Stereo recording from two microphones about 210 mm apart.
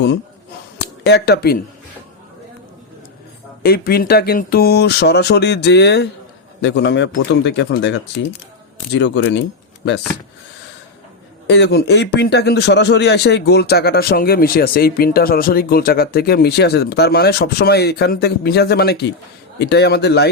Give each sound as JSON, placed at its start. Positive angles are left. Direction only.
{"t": 1.0, "sound": "a man's voice", "side_deg": 55}
{"t": 3.6, "sound": "a man's voice", "side_deg": 45}
{"t": 11.4, "sound": "a man's voice", "side_deg": 55}